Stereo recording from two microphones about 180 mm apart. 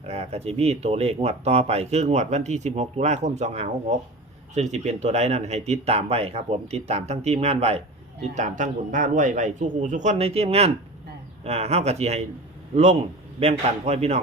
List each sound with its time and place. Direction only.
0.0 s a man's voice: 35° right (ahead or behind)